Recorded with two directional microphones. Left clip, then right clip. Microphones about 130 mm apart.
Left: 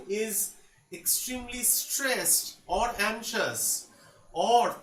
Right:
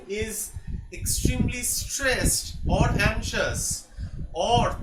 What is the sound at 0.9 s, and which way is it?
Speech, 15° right (ahead or behind).